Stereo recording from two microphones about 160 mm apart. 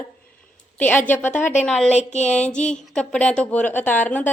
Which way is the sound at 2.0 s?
45° left (ahead or behind).